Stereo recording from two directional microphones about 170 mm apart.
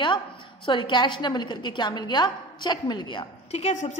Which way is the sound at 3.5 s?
40° left (ahead or behind).